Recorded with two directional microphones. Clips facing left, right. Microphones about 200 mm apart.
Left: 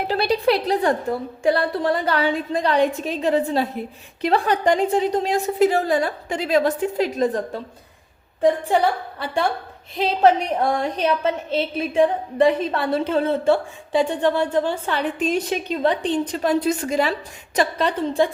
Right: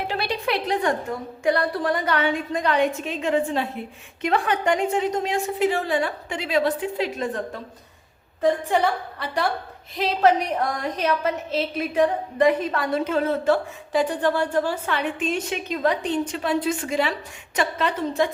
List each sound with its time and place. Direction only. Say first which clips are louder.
0.1 s a woman's voice: left 9 dB; 35° left (ahead or behind)
8.4 s a woman's voice: left 3 dB; 30° left (ahead or behind)
10.0 s a woman's voice: left 2 dB; 30° left (ahead or behind)